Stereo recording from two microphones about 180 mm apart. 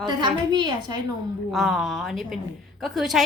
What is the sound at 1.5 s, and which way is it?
A woman's voice, centre (ahead or behind).